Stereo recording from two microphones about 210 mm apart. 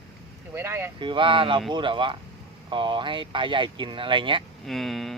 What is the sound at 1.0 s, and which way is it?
Speech, 25° right (ahead or behind).